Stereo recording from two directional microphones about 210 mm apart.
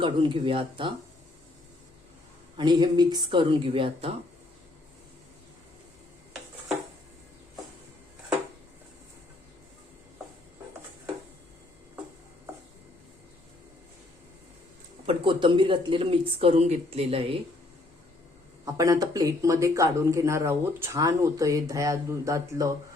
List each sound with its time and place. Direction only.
0.0 s speech: 25° right (ahead or behind)
2.6 s speech: 20° right (ahead or behind)
15.0 s speech: 25° right (ahead or behind)
18.6 s speech: 15° right (ahead or behind)